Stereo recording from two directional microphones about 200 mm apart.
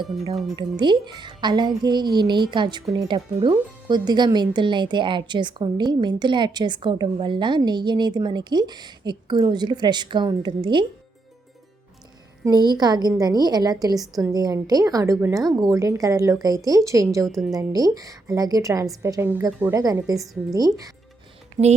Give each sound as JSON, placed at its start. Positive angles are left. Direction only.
{"t": 0.5, "sound": "speech", "side_deg": -20}
{"t": 12.5, "sound": "a woman's voice", "side_deg": -20}
{"t": 17.2, "sound": "a woman's voice", "side_deg": 0}
{"t": 17.5, "sound": "a woman's voice", "side_deg": -15}